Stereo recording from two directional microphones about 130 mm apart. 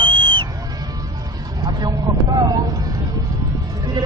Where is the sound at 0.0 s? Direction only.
40° right (ahead or behind).